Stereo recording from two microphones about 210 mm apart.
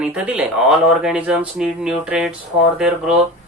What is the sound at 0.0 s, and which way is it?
Speech, 5° right (ahead or behind).